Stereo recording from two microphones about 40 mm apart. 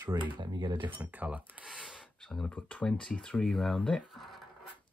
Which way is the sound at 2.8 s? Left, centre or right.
Left.